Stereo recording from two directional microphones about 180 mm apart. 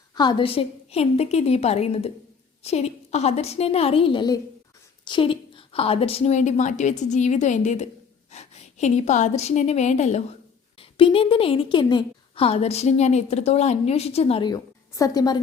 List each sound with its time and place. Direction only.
0.2 s a woman's voice: 25° left (ahead or behind)